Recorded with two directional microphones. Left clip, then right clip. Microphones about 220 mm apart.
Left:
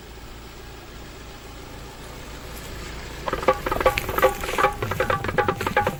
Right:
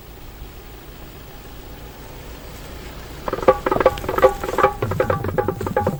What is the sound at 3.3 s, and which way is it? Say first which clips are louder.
Patter: right 5 dB; 45° right (ahead or behind).